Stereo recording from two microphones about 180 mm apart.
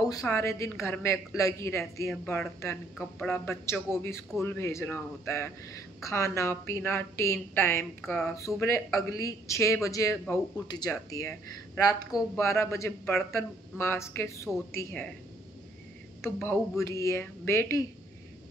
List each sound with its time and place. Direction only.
0.3 s a woman's voice: 15° left (ahead or behind)
16.2 s a woman's voice: 10° left (ahead or behind)